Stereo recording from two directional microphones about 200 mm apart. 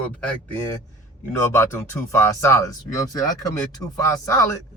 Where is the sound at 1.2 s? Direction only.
15° left (ahead or behind).